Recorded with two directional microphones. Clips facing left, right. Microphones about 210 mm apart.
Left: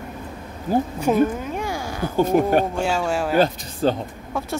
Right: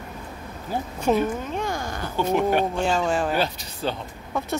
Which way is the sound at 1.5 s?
10° left (ahead or behind).